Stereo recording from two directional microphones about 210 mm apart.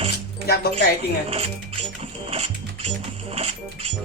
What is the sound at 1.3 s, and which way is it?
Speech, 25° right (ahead or behind).